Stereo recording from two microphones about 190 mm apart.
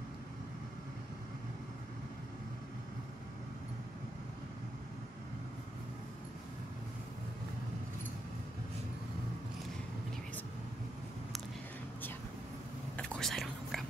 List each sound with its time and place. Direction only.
12.9 s whispering: 5° left (ahead or behind)